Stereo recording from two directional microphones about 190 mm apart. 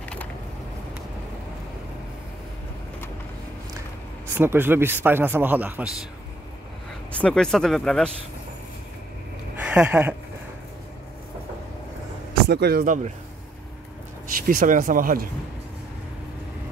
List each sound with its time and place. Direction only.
0.0 s a sound: 5° left (ahead or behind)
4.4 s speech: 10° right (ahead or behind)
7.1 s speech: 5° left (ahead or behind)
9.8 s speech: 5° right (ahead or behind)
12.4 s speech: 60° right (ahead or behind); by 13.1 s 45° right (ahead or behind)
14.4 s speech: 45° right (ahead or behind)